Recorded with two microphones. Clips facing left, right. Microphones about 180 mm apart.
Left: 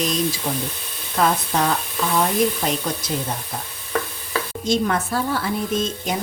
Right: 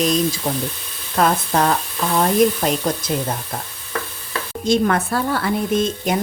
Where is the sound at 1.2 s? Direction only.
60° right (ahead or behind).